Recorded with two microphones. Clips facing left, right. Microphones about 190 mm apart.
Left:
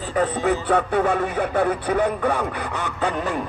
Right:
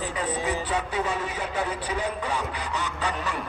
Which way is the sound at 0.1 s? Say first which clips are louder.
Left 12 dB; 55° left (ahead or behind).